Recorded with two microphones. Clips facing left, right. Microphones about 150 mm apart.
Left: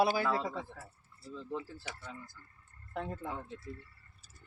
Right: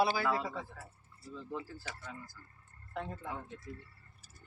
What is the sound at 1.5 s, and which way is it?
Speech, 25° left (ahead or behind).